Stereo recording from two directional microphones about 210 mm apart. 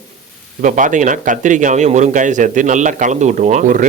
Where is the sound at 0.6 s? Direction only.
40° right (ahead or behind).